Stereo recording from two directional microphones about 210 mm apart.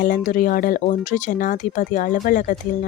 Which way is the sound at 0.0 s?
40° left (ahead or behind).